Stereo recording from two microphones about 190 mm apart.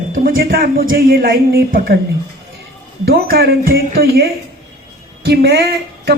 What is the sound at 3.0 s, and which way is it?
A woman's voice, 55° right (ahead or behind).